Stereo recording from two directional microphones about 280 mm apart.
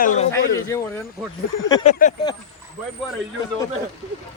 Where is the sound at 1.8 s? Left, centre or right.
Left.